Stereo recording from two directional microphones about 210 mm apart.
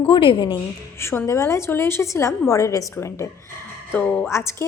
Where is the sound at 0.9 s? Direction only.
10° left (ahead or behind).